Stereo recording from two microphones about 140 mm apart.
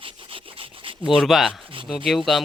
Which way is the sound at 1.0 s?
Centre (ahead or behind).